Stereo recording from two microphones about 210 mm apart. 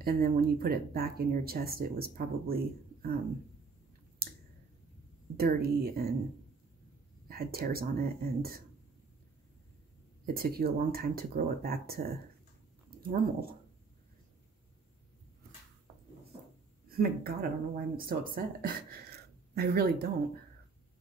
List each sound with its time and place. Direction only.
0.0 s speech: 45° right (ahead or behind)
5.4 s speech: 45° right (ahead or behind)
7.2 s speech: 45° right (ahead or behind)
10.2 s speech: 45° right (ahead or behind)
13.1 s speech: 45° right (ahead or behind)
16.9 s speech: 45° right (ahead or behind)